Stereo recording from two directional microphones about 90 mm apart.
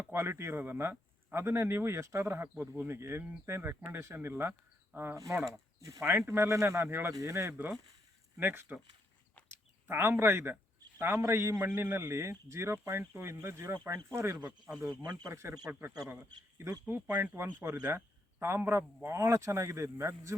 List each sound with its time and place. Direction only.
0.0 s speech: 25° right (ahead or behind)
2.6 s speech: 15° right (ahead or behind)
5.5 s speech: 35° right (ahead or behind)
9.8 s speech: 25° right (ahead or behind)
14.8 s speech: 40° right (ahead or behind)
15.3 s a man's voice: 30° right (ahead or behind)